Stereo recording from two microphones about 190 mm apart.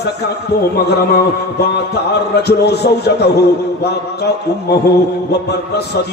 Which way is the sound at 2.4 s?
60° left (ahead or behind).